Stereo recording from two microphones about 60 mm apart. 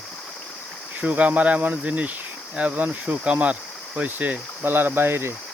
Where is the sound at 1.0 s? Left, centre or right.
Right.